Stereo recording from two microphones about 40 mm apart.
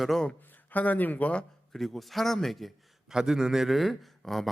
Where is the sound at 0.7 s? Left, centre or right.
Left.